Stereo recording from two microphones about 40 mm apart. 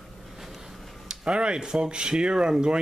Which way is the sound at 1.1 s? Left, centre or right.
Right.